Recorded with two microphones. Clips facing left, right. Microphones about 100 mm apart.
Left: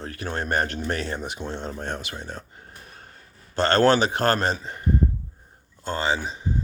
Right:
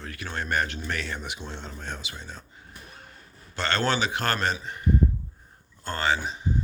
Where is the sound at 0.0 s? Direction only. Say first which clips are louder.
Left 4 dB; 35° left (ahead or behind); by 2.7 s 55° left (ahead or behind).